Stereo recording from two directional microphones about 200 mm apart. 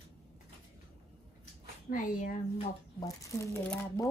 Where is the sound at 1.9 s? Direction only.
40° left (ahead or behind).